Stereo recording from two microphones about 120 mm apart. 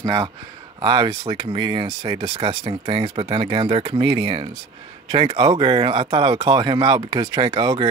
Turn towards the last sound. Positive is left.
turn(degrees=-35)  # may be behind; listen again after turning